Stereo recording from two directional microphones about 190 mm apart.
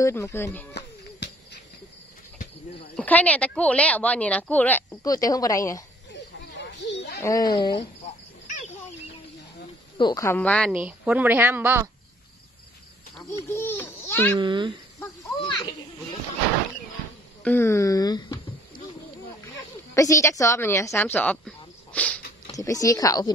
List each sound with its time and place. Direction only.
0.0 s a woman's voice: 15° left (ahead or behind)
0.7 s a sound: 65° left (ahead or behind)
3.0 s a woman's voice: 10° left (ahead or behind)
6.1 s a sound: 65° left (ahead or behind)
7.2 s speech: 20° left (ahead or behind)
8.5 s a sound: 40° left (ahead or behind)
9.9 s a woman's voice: 20° left (ahead or behind)
10.7 s a woman's voice: 5° right (ahead or behind)
13.5 s a sound: 10° left (ahead or behind)
14.4 s a child's voice: 25° right (ahead or behind)
17.4 s speech: 10° left (ahead or behind)
19.9 s a woman's voice: 15° left (ahead or behind)
22.5 s a woman's voice: 20° left (ahead or behind)